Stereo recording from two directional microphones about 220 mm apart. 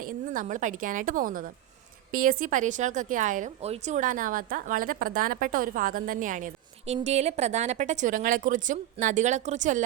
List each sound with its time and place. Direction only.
0.0 s a woman's voice: 40° right (ahead or behind)